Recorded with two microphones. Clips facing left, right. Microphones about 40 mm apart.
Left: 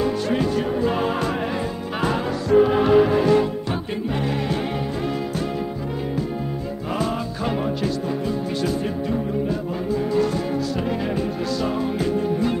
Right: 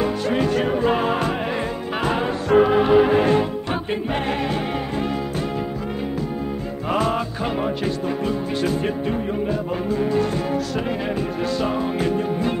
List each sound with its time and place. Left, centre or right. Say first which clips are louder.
0.4 s music: right 2 dB; right
0.7 s music: right 2 dB; right
2.5 s music: right 1 dB; right
2.8 s music: even; centre
3.1 s music: even; right
6.9 s music: right 4 dB; right
7.3 s music: right 1 dB; right
8.2 s music: right 1 dB; right
10.8 s music: even; right